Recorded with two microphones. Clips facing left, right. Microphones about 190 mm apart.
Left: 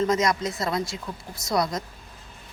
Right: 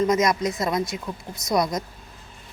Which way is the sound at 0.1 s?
20° right (ahead or behind).